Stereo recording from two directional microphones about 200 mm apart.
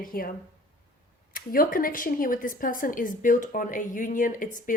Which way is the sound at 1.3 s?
45° left (ahead or behind).